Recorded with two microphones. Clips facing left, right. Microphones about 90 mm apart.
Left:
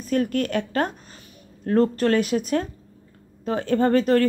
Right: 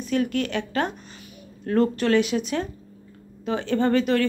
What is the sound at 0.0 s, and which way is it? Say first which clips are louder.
A woman's voice: left 1 dB; 45° left (ahead or behind).